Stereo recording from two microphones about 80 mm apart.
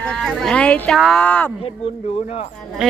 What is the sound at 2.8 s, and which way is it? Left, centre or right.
Speech, centre.